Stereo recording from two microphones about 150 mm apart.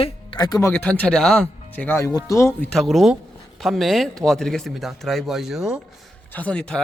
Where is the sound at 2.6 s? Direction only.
Centre (ahead or behind).